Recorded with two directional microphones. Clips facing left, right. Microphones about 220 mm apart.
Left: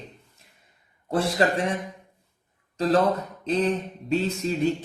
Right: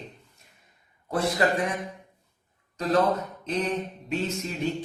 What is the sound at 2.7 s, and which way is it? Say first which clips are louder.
Speech: left 3 dB; 30° left (ahead or behind).